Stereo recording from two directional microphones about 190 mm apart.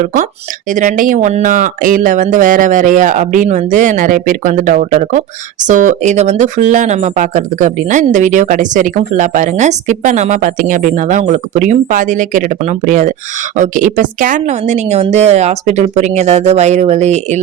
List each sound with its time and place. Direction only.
0.0 s speech: 45° right (ahead or behind)